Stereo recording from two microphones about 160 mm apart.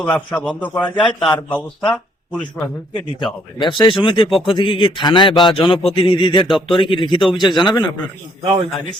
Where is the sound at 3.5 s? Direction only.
30° left (ahead or behind).